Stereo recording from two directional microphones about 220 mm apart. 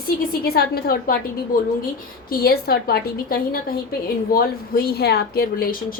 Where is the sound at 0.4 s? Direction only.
45° left (ahead or behind).